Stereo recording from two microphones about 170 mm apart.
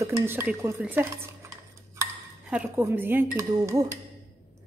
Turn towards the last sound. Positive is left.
turn(degrees=-20)  # may be behind; listen again after turning